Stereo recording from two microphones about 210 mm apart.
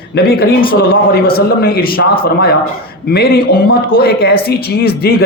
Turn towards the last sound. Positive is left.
turn(degrees=50)  # may be behind; listen again after turning